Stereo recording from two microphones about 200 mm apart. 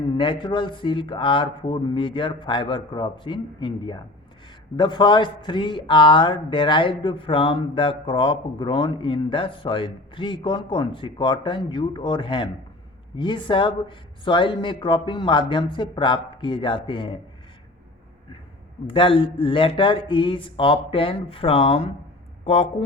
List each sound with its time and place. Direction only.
0.0 s a man's voice: 25° left (ahead or behind)
18.9 s a man's voice: 25° left (ahead or behind)